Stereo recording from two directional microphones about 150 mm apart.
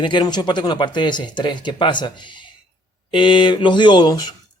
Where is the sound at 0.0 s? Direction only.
30° left (ahead or behind).